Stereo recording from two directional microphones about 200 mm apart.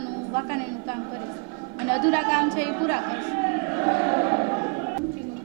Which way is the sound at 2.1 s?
20° right (ahead or behind).